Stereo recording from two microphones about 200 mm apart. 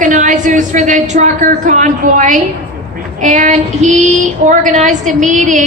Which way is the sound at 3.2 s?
40° right (ahead or behind).